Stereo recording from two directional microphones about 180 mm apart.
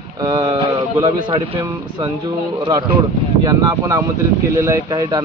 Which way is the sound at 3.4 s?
20° right (ahead or behind).